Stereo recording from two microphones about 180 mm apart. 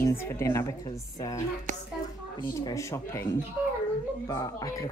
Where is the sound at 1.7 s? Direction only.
45° right (ahead or behind).